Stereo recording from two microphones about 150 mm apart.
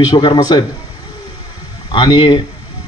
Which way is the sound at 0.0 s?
30° left (ahead or behind).